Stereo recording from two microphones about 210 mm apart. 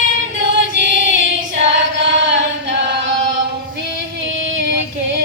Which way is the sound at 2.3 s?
55° right (ahead or behind).